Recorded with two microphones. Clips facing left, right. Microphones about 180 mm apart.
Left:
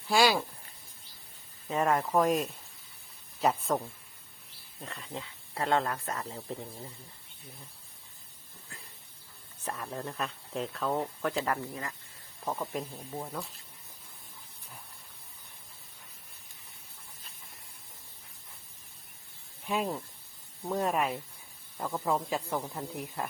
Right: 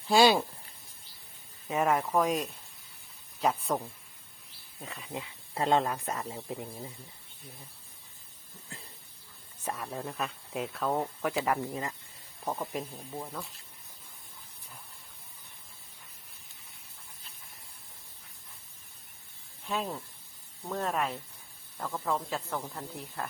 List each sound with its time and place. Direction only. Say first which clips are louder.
0.1 s speech: right 3 dB; 25° right (ahead or behind)
1.6 s speech: even; 5° right (ahead or behind)
9.6 s speech: right 1 dB; 5° right (ahead or behind); by 11.9 s 20° right (ahead or behind)
12.5 s speech: even; 5° right (ahead or behind)
13.1 s speech: left 1 dB; 10° left (ahead or behind)
19.6 s speech: left 2 dB; 10° left (ahead or behind)